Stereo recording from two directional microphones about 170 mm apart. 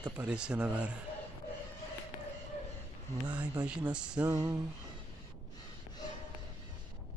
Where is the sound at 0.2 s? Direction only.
5° right (ahead or behind).